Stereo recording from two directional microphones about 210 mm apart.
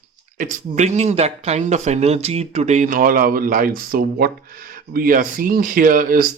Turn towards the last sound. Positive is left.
turn(degrees=-40)  # may be behind; listen again after turning